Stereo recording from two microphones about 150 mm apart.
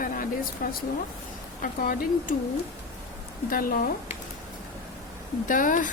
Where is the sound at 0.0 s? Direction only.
70° left (ahead or behind).